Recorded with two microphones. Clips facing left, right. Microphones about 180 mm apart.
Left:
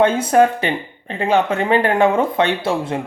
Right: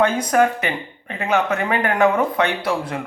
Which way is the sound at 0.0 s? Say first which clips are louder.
Left 3 dB; 25° left (ahead or behind).